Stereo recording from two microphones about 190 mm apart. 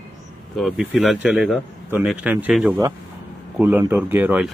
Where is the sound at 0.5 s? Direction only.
Centre (ahead or behind).